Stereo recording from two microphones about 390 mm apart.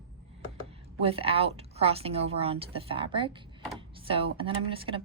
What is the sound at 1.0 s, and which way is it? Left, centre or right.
A woman's voice, centre.